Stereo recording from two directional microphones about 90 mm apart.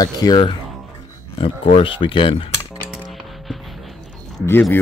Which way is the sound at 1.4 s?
85° left.